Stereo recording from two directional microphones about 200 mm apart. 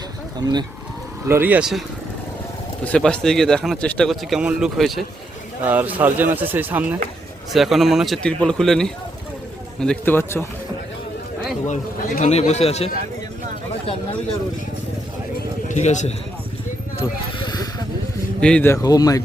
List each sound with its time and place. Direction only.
1.3 s speech: 10° right (ahead or behind)
2.8 s speech: 5° left (ahead or behind)
11.7 s a man's voice: 35° left (ahead or behind)
15.7 s a man's voice: 35° left (ahead or behind)
17.0 s speech: 20° left (ahead or behind)
18.3 s speech: 5° left (ahead or behind)